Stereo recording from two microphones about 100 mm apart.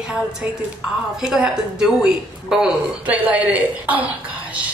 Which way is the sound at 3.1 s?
15° right (ahead or behind).